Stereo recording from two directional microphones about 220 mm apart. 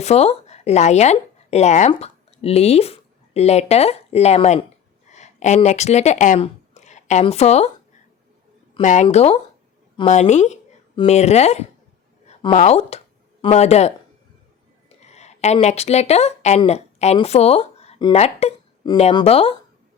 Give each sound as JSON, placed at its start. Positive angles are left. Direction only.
{"t": 0.0, "sound": "speech", "side_deg": 30}
{"t": 8.7, "sound": "a woman's voice", "side_deg": 35}